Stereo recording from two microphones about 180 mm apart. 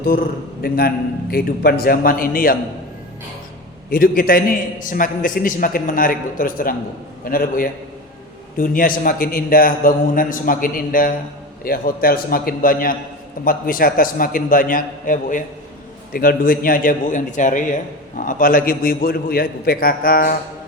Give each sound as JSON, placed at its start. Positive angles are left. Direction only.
{"t": 0.6, "sound": "a man's voice", "side_deg": 55}
{"t": 3.8, "sound": "a man's voice", "side_deg": 55}